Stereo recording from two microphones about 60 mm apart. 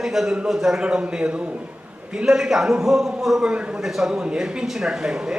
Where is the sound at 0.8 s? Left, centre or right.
Centre.